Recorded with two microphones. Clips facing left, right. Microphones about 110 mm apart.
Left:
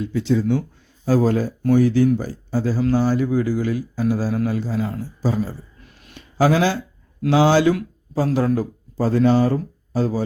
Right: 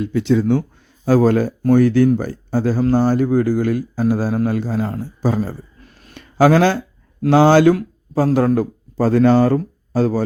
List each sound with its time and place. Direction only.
0.0 s speech: 65° right (ahead or behind)